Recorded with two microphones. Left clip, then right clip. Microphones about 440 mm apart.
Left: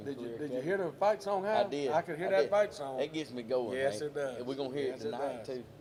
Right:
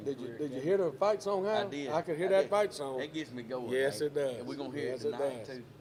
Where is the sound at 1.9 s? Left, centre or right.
Centre.